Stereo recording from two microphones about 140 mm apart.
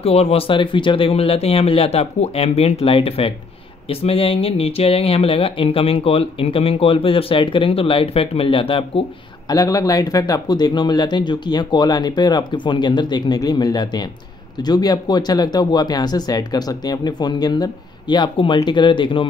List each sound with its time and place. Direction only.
0.0 s speech: 45° left (ahead or behind)
9.5 s speech: 25° left (ahead or behind)